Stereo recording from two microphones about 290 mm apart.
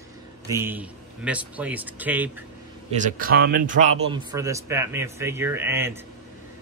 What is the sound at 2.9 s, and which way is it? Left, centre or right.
Speech, right.